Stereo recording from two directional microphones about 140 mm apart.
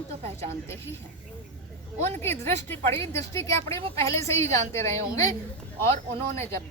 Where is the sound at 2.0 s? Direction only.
15° left (ahead or behind).